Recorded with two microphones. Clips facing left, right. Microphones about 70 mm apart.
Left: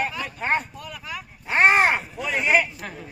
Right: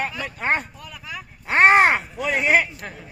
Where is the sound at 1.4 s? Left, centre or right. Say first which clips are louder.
Right 3 dB; right.